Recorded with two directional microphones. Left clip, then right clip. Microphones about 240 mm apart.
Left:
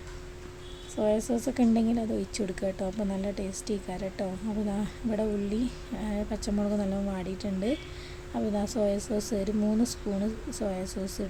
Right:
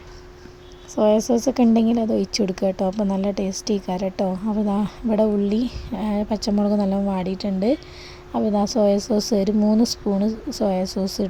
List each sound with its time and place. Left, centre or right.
0.9 s a woman's voice: right